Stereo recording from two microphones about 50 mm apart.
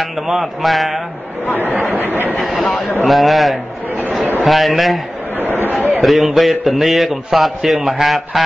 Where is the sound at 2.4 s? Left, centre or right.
Centre.